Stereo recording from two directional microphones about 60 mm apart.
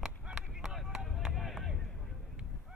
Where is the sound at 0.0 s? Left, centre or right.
Centre.